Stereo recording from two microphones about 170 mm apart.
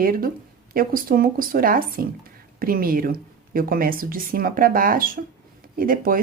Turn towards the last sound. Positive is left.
turn(degrees=-55)  # may be behind; listen again after turning